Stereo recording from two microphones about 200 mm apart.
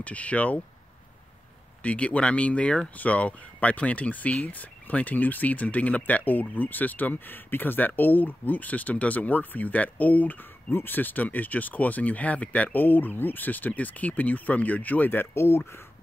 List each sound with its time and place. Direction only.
0.0 s speech: 5° left (ahead or behind)
1.8 s speech: 5° left (ahead or behind)